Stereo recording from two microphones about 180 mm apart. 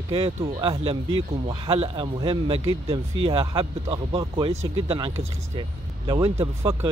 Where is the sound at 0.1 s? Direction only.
30° right (ahead or behind).